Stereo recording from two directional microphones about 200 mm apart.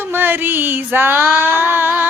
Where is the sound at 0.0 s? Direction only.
10° right (ahead or behind).